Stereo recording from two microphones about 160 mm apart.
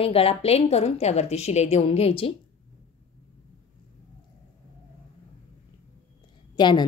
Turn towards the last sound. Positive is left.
turn(degrees=30)  # may be behind; listen again after turning